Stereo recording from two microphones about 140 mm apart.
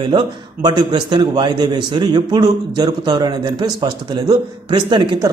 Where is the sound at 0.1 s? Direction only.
30° right (ahead or behind).